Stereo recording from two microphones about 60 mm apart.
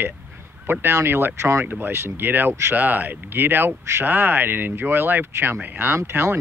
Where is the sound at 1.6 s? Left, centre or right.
Right.